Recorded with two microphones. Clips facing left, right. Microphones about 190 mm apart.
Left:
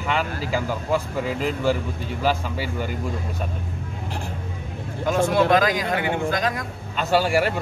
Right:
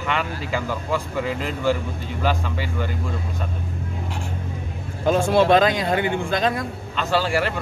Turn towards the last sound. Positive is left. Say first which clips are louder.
# left 2 dB
turn(degrees=10)  # may be behind; listen again after turning